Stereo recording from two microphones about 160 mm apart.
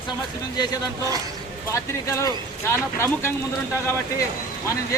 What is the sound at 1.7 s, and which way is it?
Speech, 20° left (ahead or behind).